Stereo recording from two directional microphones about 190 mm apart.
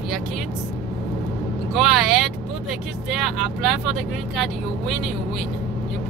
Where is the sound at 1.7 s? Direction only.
Centre (ahead or behind).